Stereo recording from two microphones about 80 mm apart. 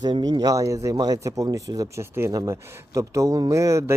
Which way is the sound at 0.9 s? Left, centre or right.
Right.